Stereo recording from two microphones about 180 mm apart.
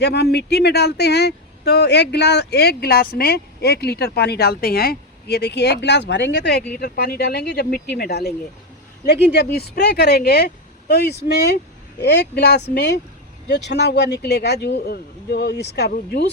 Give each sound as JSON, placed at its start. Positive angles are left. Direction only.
{"t": 0.0, "sound": "speech", "side_deg": 65}
{"t": 6.7, "sound": "speech", "side_deg": 60}